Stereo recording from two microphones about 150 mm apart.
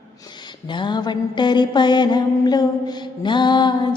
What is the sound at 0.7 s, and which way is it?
Mantra, 30° left (ahead or behind).